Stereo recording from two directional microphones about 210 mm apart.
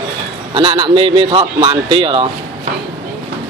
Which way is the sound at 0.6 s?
25° right (ahead or behind).